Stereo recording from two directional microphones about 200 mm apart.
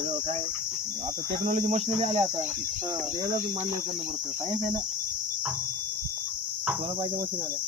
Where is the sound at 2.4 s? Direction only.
10° right (ahead or behind).